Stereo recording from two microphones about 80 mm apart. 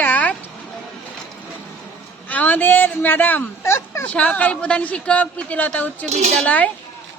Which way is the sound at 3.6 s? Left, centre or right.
Left.